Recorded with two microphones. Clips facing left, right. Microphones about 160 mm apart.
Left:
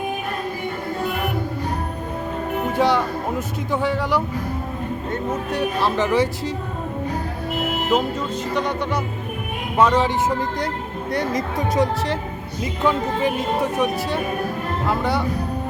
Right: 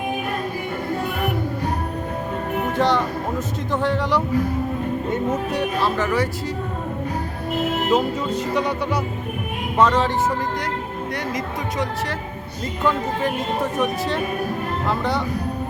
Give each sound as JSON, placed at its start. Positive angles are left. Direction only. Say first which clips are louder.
{"t": 2.7, "sound": "speech", "louder": "left 1 dB", "side_deg": 10}
{"t": 5.3, "sound": "music", "louder": "right 1 dB", "side_deg": 0}
{"t": 5.8, "sound": "speech", "louder": "left 4 dB", "side_deg": 20}
{"t": 7.9, "sound": "music", "louder": "even", "side_deg": 0}
{"t": 9.7, "sound": "speech", "louder": "left 1 dB", "side_deg": 10}
{"t": 11.1, "sound": "speech", "louder": "left 6 dB", "side_deg": 35}
{"t": 12.8, "sound": "speech", "louder": "left 1 dB", "side_deg": 15}